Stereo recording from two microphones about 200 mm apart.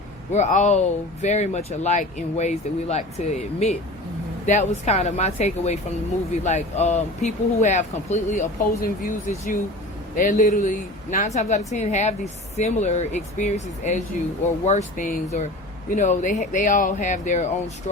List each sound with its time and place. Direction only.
0.3 s speech: 35° left (ahead or behind)